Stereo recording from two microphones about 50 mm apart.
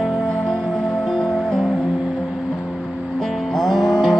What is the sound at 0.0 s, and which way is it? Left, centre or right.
Music, centre.